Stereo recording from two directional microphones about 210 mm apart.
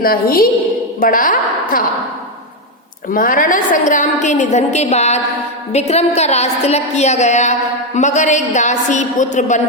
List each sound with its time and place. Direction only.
0.0 s a woman's voice: 45° left (ahead or behind)
3.1 s a woman's voice: 40° left (ahead or behind)